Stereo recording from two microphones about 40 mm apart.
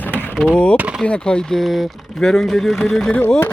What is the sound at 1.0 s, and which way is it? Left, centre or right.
Speech, left.